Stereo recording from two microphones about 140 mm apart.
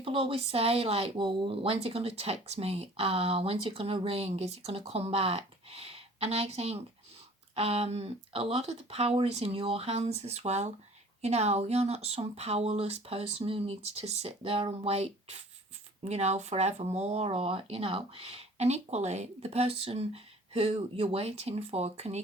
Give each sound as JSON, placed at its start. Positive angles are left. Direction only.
{"t": 0.0, "sound": "speech", "side_deg": -40}